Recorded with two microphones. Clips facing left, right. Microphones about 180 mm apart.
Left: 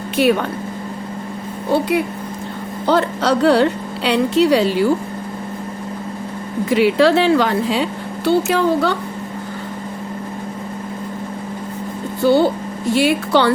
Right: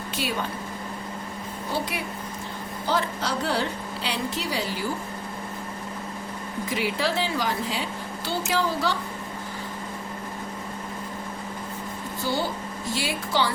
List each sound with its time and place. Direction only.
0.2 s speech: 65° left (ahead or behind)
1.7 s speech: 60° left (ahead or behind)
6.7 s speech: 70° left (ahead or behind)
12.2 s speech: 65° left (ahead or behind)